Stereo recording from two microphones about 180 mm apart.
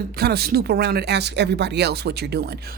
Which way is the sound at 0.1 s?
60° right (ahead or behind).